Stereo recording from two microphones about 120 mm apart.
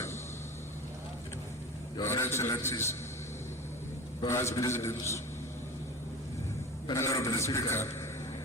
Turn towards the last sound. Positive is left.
turn(degrees=20)  # may be behind; listen again after turning